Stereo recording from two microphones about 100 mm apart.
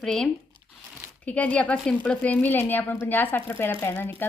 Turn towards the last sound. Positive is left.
turn(degrees=20)  # may be behind; listen again after turning